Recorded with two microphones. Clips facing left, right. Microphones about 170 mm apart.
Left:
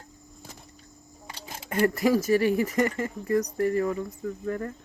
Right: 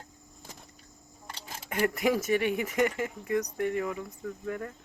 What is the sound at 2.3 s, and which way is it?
Speech, 35° left (ahead or behind).